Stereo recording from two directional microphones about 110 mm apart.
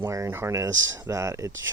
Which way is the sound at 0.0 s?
25° right (ahead or behind).